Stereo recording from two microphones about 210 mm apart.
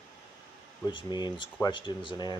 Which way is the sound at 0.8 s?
20° left (ahead or behind).